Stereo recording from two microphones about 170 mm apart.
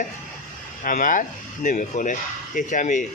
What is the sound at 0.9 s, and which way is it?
A man's voice, 50° left (ahead or behind).